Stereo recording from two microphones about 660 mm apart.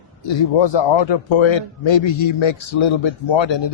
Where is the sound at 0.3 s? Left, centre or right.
Left.